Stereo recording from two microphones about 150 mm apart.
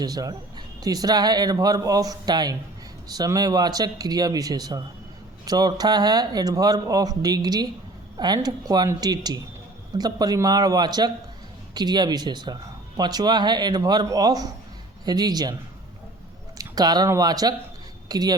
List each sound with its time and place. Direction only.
0.0 s speech: 25° right (ahead or behind)
16.6 s speech: 25° right (ahead or behind)